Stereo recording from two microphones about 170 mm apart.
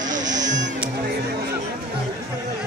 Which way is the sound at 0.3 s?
45° right (ahead or behind).